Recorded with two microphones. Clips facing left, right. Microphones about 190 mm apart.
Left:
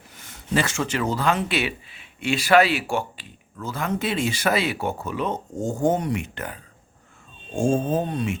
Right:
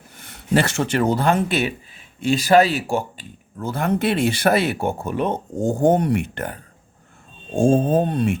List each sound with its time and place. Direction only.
0.2 s speech: 65° right (ahead or behind)
7.5 s speech: 35° right (ahead or behind)
7.9 s speech: 60° right (ahead or behind)